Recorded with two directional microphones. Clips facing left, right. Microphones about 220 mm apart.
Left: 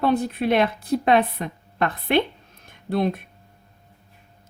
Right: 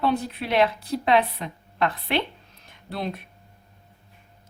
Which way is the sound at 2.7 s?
50° left (ahead or behind).